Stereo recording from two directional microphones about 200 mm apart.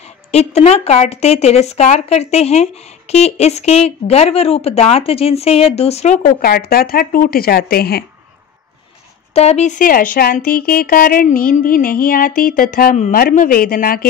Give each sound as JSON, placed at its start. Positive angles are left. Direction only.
{"t": 0.3, "sound": "speech", "side_deg": 30}
{"t": 9.3, "sound": "speech", "side_deg": 35}